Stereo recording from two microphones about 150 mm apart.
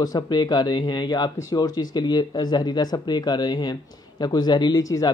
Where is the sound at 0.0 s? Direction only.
25° left (ahead or behind).